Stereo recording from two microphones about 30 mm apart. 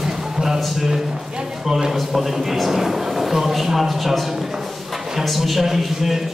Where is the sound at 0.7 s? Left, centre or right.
Centre.